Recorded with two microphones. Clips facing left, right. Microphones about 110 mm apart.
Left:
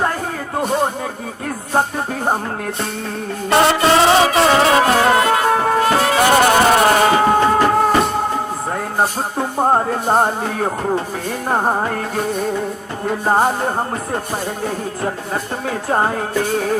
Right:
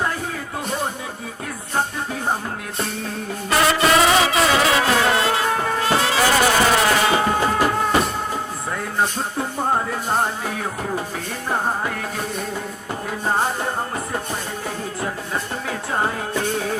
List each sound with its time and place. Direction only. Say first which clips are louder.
3.5 s music: left 4 dB; 30° left (ahead or behind)
5.4 s music: left 6 dB; 40° left (ahead or behind)
6.1 s music: left 5 dB; 55° left (ahead or behind)
15.9 s music: left 6 dB; 45° left (ahead or behind)